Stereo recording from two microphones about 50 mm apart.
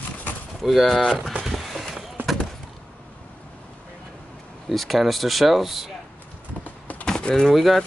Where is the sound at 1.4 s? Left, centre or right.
Centre.